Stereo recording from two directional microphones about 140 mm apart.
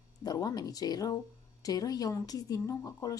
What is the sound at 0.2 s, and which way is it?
Speech, 25° left (ahead or behind).